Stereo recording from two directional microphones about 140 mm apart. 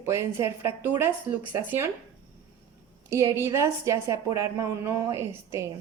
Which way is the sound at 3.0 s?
20° right (ahead or behind).